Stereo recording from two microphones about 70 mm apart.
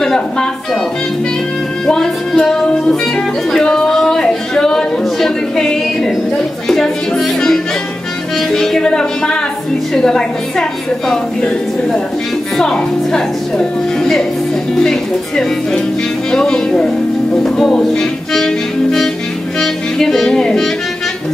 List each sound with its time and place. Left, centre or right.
0.0 s speech: centre
1.9 s music: centre
3.5 s a sound: centre
6.7 s music: centre
9.9 s speech: centre
12.5 s speech: centre
17.4 s music: centre